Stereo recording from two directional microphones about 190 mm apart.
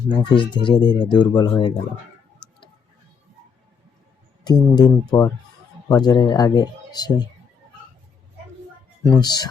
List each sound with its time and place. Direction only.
0.1 s speech: 25° left (ahead or behind)
4.4 s speech: 20° left (ahead or behind)
9.0 s speech: 20° left (ahead or behind)